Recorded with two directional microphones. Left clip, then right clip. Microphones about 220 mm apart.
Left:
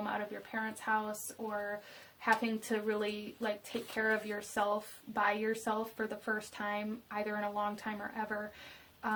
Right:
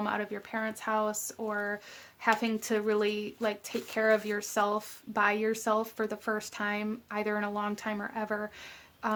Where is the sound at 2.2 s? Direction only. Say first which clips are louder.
Right 4 dB; 45° right (ahead or behind).